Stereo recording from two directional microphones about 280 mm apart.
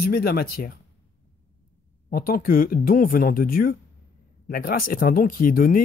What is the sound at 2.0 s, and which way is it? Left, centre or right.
Speech, left.